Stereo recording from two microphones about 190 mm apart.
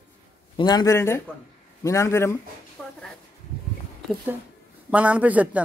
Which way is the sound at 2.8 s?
5° left (ahead or behind).